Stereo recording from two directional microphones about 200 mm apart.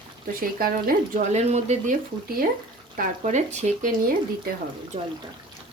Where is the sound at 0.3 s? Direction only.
45° right (ahead or behind).